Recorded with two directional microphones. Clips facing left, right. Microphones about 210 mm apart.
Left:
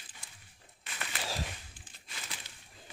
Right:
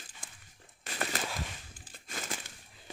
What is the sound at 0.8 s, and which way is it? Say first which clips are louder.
Bird: right 7 dB; 40° right (ahead or behind).